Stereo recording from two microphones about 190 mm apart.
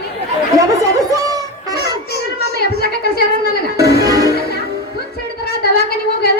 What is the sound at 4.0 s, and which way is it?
Music, 20° right (ahead or behind).